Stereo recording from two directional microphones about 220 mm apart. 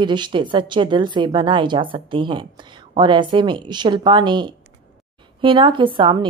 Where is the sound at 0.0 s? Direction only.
20° right (ahead or behind).